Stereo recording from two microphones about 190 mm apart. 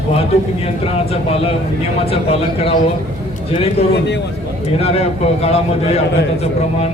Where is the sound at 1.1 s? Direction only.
30° left (ahead or behind).